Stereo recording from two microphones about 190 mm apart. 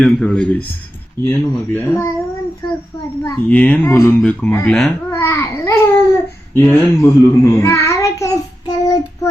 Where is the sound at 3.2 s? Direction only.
10° left (ahead or behind).